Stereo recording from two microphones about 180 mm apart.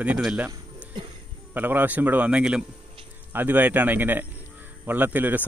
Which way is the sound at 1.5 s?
10° right (ahead or behind).